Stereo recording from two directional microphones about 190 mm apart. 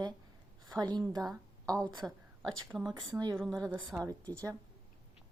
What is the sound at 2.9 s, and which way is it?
Speech, 20° right (ahead or behind).